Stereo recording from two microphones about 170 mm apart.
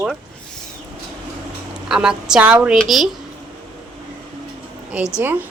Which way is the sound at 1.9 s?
5° right (ahead or behind).